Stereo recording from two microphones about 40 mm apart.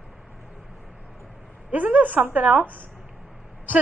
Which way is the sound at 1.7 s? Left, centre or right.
Right.